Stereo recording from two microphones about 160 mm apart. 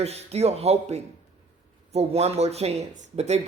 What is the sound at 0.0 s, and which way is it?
A man's voice, 40° right (ahead or behind).